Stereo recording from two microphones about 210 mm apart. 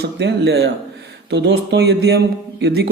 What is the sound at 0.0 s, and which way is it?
Speech, 55° right (ahead or behind).